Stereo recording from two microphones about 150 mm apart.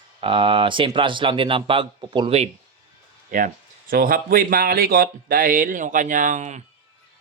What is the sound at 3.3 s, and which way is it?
Speech, 65° right (ahead or behind).